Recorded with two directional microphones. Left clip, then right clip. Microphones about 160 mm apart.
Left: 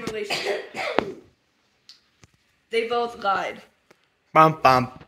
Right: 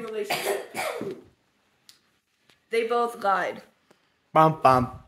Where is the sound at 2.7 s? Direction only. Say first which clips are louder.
Even; 15° right (ahead or behind).